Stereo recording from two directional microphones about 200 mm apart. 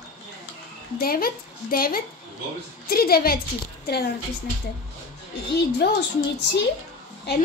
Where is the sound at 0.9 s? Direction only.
45° left (ahead or behind).